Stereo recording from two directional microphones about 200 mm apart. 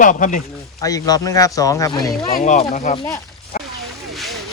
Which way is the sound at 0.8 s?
15° left (ahead or behind).